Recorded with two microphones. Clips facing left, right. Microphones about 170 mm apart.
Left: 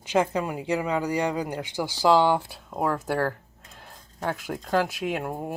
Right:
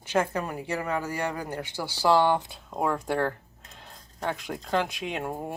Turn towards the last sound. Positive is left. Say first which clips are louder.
# left 3 dB
turn(degrees=5)  # may be behind; listen again after turning